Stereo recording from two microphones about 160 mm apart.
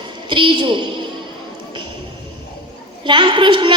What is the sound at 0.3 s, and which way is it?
Speech, 30° right (ahead or behind).